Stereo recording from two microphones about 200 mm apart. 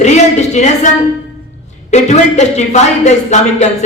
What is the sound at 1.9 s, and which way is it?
Speech, 35° left (ahead or behind).